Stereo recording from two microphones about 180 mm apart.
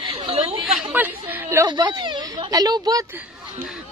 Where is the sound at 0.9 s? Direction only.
10° right (ahead or behind).